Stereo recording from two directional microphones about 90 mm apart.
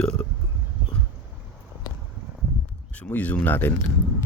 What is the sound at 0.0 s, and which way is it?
Burping, 15° left (ahead or behind).